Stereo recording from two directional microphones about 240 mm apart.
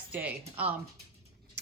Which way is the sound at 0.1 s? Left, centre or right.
Centre.